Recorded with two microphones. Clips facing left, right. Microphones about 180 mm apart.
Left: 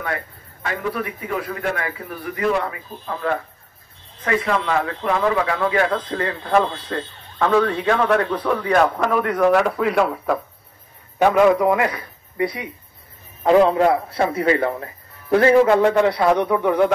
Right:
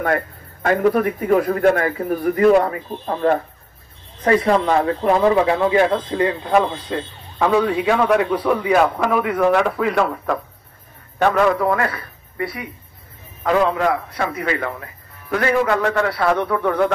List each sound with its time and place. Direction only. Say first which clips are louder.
0.0 s a man's voice: right 7 dB; 50° right (ahead or behind); by 16.9 s 10° left (ahead or behind)